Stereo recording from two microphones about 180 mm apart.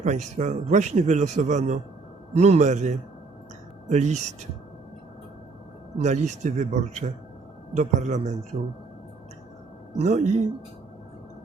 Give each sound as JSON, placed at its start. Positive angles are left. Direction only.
{"t": 0.0, "sound": "a man's voice", "side_deg": -40}
{"t": 6.0, "sound": "a man's voice", "side_deg": -40}
{"t": 10.0, "sound": "a man's voice", "side_deg": -40}